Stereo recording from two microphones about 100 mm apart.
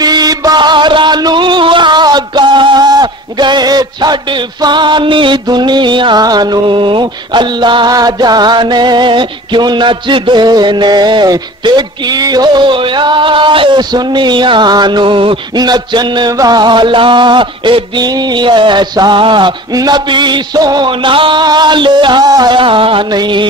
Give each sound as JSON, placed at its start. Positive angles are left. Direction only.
{"t": 0.0, "sound": "a sound", "side_deg": -40}
{"t": 6.2, "sound": "music", "side_deg": -45}
{"t": 15.6, "sound": "music", "side_deg": -45}
{"t": 19.7, "sound": "music", "side_deg": -40}